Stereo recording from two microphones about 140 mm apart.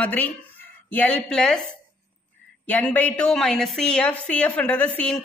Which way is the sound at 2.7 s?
10° left (ahead or behind).